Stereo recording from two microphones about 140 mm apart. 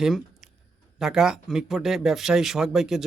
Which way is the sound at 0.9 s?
5° right (ahead or behind).